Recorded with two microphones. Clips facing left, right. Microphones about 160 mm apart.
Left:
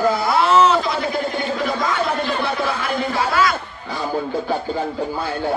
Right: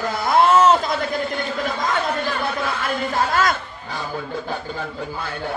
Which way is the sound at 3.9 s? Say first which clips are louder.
Left 6 dB; 35° left (ahead or behind).